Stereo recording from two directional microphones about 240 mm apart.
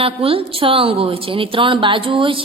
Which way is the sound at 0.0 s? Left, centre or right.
Right.